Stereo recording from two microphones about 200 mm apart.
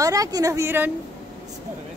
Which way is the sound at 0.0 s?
15° right (ahead or behind).